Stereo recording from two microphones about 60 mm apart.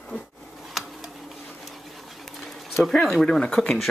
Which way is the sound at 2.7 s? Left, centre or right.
Centre.